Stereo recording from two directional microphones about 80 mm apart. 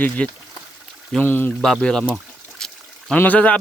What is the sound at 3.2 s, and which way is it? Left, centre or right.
Speech, left.